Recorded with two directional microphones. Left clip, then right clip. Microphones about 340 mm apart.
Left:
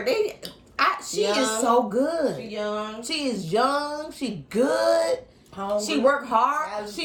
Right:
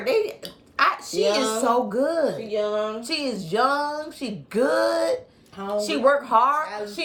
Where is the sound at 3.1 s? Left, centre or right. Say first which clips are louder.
Even; centre.